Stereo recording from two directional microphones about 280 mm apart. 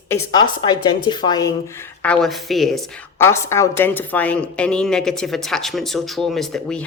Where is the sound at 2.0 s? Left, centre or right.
Centre.